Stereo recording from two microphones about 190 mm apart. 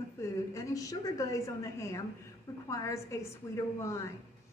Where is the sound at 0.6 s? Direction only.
15° left (ahead or behind).